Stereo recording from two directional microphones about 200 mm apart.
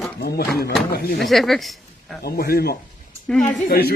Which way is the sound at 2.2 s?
50° left (ahead or behind).